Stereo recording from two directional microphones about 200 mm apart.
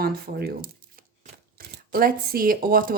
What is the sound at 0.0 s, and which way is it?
Speech, 50° right (ahead or behind).